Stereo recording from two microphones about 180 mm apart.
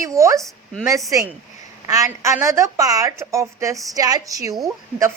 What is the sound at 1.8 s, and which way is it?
A woman's voice, 15° right (ahead or behind).